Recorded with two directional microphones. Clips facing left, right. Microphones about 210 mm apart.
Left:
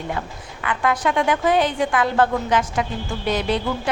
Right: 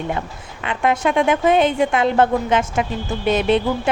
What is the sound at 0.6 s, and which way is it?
A woman's voice, 25° right (ahead or behind).